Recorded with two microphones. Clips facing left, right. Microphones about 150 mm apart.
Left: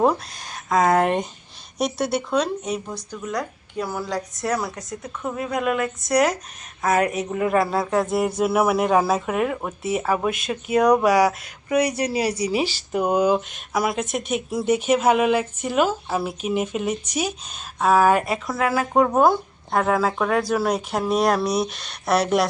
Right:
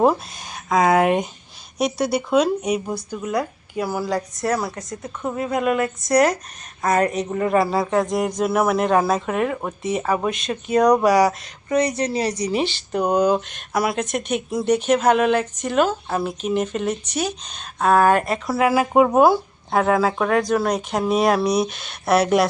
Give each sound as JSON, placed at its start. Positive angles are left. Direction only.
{"t": 0.0, "sound": "speech", "side_deg": 0}
{"t": 18.4, "sound": "speech", "side_deg": -10}